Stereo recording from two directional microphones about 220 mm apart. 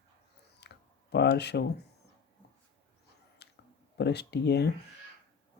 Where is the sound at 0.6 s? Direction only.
50° left (ahead or behind).